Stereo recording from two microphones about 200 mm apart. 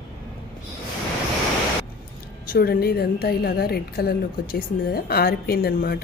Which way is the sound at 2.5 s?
50° left (ahead or behind).